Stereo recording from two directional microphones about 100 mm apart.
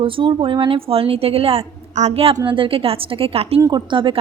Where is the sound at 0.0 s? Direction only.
60° right (ahead or behind); by 1.6 s 75° right (ahead or behind).